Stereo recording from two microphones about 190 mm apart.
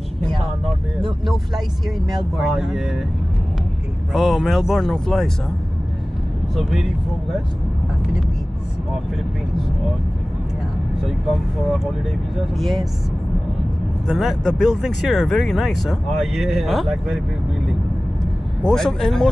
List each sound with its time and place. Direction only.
2.3 s speech: centre (ahead or behind)
4.1 s speech: centre (ahead or behind)
6.5 s speech: centre (ahead or behind)
11.1 s speech: centre (ahead or behind)
14.0 s speech: centre (ahead or behind)
18.6 s speech: 5° left (ahead or behind)